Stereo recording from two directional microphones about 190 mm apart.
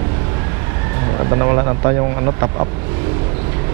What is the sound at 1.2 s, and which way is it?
Speech, 20° right (ahead or behind).